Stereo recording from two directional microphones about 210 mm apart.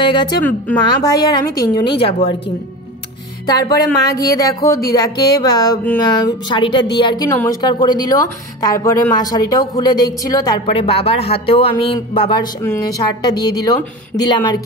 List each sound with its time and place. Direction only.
0.0 s speech: 20° left (ahead or behind)
3.4 s music: 20° left (ahead or behind)
4.3 s speech: 15° left (ahead or behind)